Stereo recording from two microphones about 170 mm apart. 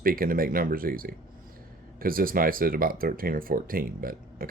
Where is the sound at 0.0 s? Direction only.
60° right (ahead or behind).